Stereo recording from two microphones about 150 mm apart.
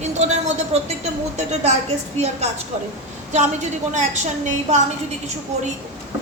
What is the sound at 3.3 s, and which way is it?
A woman's voice, 50° right (ahead or behind).